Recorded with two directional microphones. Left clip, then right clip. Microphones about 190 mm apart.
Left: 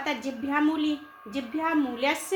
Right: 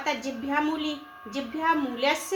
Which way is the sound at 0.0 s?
30° left (ahead or behind).